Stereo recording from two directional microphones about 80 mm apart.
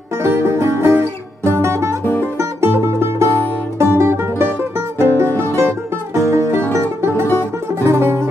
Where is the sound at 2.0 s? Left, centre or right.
Left.